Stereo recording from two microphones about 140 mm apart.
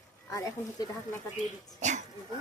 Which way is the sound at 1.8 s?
60° right (ahead or behind).